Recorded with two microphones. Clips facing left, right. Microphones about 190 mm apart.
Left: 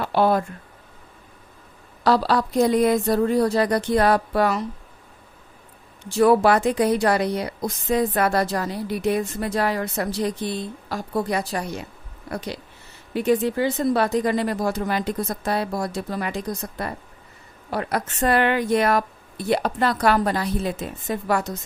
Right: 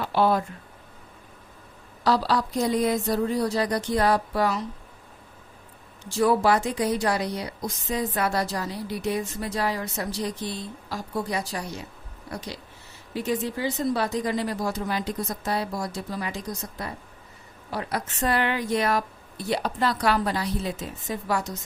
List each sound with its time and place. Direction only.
0.0 s speech: 55° left (ahead or behind)
2.0 s a woman's voice: 60° left (ahead or behind)
6.1 s a woman's voice: 60° left (ahead or behind)